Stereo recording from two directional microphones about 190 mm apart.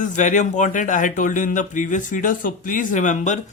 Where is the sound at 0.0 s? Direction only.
40° left (ahead or behind).